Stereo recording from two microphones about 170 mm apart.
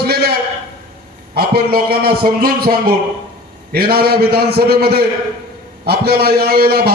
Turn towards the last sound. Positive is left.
turn(degrees=-65)  # may be behind; listen again after turning